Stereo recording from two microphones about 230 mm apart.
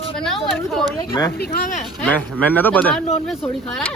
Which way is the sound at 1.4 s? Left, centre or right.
Left.